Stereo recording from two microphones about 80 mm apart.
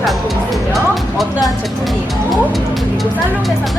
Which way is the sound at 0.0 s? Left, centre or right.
Centre.